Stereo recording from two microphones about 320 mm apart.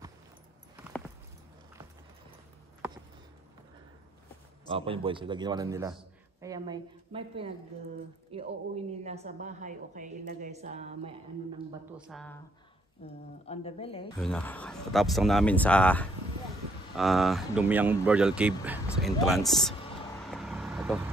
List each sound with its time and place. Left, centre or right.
4.6 s a man's voice: centre
12.1 s speech: centre
13.0 s speech: centre
14.2 s speech: centre
20.2 s vehicle: centre